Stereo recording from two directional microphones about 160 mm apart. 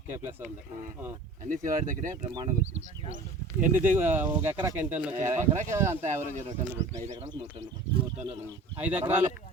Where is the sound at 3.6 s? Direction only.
10° right (ahead or behind).